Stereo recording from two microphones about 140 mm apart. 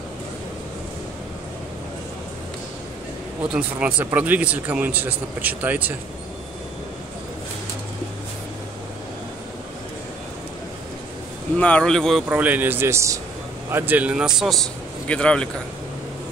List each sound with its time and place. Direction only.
3.5 s speech: 10° right (ahead or behind)
11.5 s a man's voice: 10° left (ahead or behind)
12.3 s a man's voice: 10° right (ahead or behind); by 15.5 s 5° left (ahead or behind)